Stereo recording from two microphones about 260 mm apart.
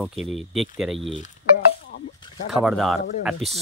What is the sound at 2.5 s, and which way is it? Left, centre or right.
Speech, centre.